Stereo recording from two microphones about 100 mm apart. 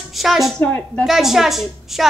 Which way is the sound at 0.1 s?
Centre (ahead or behind).